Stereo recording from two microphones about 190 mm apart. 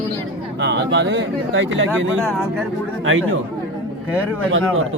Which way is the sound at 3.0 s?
90° right.